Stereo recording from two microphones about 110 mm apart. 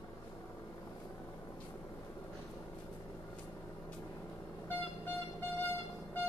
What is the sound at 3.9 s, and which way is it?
Vehicle, 20° left (ahead or behind).